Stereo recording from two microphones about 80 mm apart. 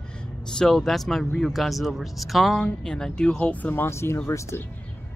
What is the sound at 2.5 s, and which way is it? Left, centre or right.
Speech, centre.